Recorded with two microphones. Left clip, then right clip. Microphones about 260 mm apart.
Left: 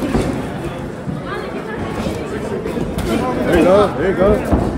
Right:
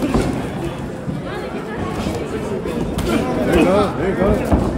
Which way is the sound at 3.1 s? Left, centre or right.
Centre.